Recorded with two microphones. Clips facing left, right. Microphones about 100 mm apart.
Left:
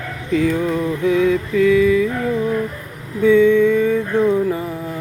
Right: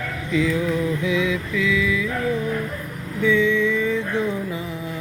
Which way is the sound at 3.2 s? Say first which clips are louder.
Left 7 dB; 50° left (ahead or behind).